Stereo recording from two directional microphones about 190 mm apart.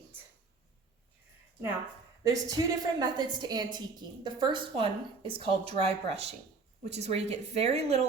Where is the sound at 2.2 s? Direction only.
20° right (ahead or behind).